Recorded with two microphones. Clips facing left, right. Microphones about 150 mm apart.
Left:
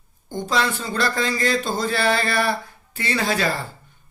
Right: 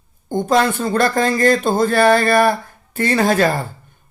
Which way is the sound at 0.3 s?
50° right (ahead or behind).